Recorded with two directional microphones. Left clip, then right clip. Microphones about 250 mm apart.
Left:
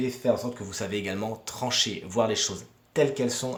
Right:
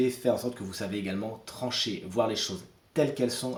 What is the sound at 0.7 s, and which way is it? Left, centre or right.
Speech, left.